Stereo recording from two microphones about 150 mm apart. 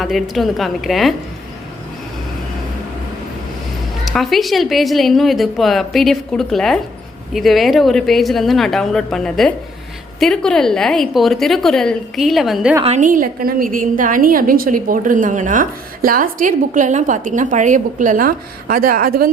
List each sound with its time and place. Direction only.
0.0 s a woman's voice: centre (ahead or behind)
4.0 s a woman's voice: centre (ahead or behind)
12.8 s a woman's voice: 55° right (ahead or behind); by 19.3 s 75° right (ahead or behind)